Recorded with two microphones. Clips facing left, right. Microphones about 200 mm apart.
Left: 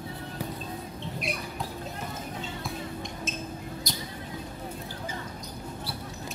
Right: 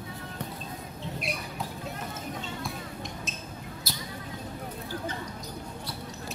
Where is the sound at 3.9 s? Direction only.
5° right (ahead or behind).